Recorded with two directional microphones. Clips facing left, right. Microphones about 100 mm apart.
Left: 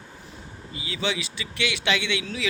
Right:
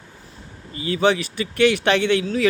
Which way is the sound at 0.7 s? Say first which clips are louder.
Right 10 dB; 45° right (ahead or behind).